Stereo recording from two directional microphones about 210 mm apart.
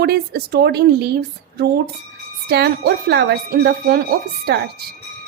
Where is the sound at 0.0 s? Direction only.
50° right (ahead or behind).